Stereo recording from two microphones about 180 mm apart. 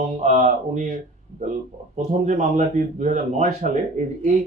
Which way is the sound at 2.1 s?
40° right (ahead or behind).